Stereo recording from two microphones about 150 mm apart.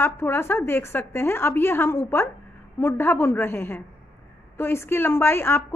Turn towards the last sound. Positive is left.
turn(degrees=15)  # may be behind; listen again after turning